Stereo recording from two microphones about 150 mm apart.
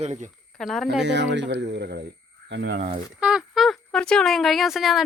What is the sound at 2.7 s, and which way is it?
Speech, 40° right (ahead or behind).